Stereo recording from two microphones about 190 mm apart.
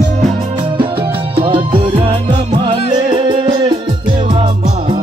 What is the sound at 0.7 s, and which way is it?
Music, 25° right (ahead or behind).